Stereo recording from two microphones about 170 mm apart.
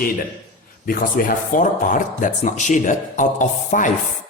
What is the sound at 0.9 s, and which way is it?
Speech, 55° left (ahead or behind).